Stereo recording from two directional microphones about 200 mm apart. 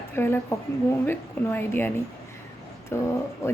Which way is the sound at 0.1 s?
10° left (ahead or behind).